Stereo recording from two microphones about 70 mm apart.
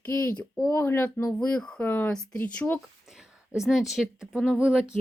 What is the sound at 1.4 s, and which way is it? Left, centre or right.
Speech, centre.